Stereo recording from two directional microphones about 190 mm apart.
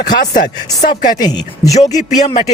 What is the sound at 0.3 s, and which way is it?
Speech, 45° left (ahead or behind).